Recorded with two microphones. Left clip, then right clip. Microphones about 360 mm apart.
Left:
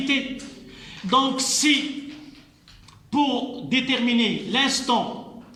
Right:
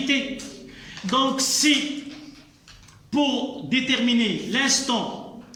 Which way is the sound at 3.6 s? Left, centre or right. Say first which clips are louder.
Even; centre.